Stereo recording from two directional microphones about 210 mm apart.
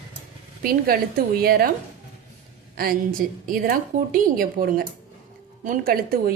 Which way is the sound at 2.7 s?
40° right (ahead or behind).